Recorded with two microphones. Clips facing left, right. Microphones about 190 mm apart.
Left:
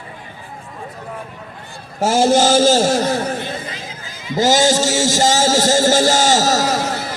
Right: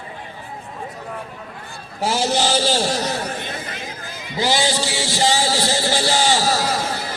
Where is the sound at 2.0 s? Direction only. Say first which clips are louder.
Left 7 dB; 45° left (ahead or behind).